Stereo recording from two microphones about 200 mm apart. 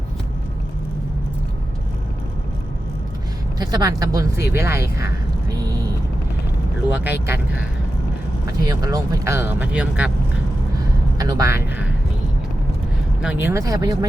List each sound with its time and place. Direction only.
3.7 s speech: 20° right (ahead or behind)
6.9 s speech: 10° right (ahead or behind)
8.6 s speech: 20° right (ahead or behind)
11.2 s speech: 15° right (ahead or behind)
13.2 s speech: 10° right (ahead or behind)